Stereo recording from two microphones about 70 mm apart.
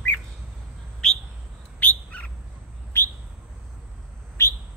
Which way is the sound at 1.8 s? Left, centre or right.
Centre.